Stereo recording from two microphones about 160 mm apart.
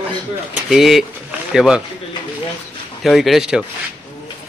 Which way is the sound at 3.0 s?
Centre (ahead or behind).